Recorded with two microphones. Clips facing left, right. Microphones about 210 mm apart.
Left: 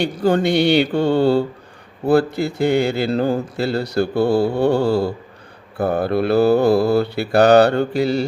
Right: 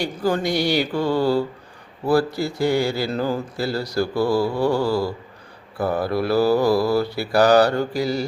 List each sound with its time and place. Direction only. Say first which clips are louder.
0.3 s speech: left 5 dB; 25° left (ahead or behind)
3.2 s speech: left 4 dB; 50° left (ahead or behind)
3.7 s speech: left 3 dB; 25° left (ahead or behind)
5.7 s speech: left 3 dB; 55° left (ahead or behind)
6.1 s speech: left 4 dB; 25° left (ahead or behind)
7.3 s mantra: left 4 dB; 60° left (ahead or behind)